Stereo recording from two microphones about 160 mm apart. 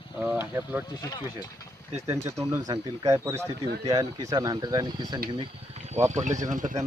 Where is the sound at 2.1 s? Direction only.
15° right (ahead or behind).